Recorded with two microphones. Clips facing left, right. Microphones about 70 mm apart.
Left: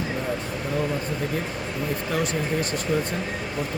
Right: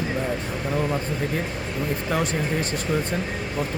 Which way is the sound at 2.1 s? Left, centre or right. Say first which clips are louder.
Right 1 dB; right.